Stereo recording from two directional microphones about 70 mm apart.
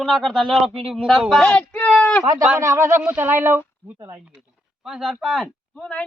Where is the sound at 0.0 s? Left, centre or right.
Centre.